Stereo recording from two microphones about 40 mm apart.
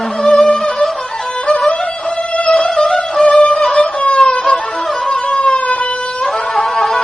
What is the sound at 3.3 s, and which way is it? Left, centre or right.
Music, left.